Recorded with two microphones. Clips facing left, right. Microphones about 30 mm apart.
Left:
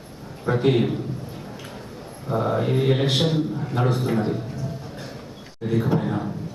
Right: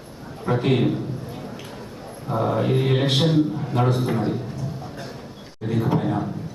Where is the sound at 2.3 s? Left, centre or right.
Centre.